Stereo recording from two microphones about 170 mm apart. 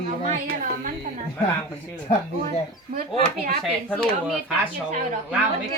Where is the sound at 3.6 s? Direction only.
Centre (ahead or behind).